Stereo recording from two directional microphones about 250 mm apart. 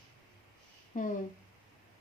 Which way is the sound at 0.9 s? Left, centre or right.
Left.